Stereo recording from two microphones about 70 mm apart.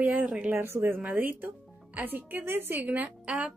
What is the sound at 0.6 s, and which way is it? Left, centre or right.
A woman's voice, right.